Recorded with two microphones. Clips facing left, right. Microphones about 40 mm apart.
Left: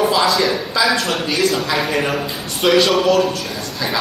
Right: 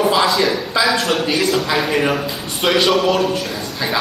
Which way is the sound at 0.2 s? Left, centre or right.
Centre.